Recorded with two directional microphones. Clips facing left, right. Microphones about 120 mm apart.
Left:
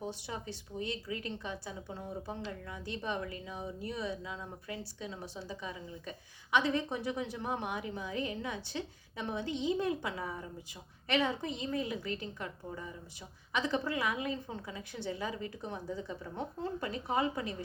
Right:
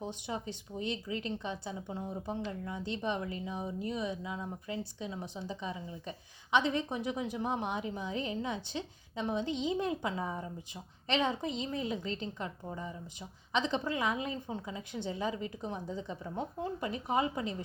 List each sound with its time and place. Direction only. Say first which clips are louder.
0.0 s a woman's voice: right 2 dB; 20° right (ahead or behind)